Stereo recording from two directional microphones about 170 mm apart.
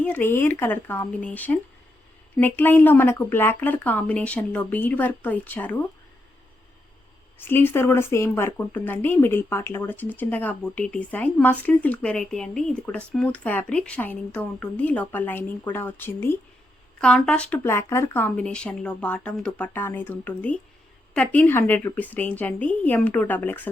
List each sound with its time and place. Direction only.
0.0 s speech: 10° left (ahead or behind)
7.3 s speech: 10° left (ahead or behind)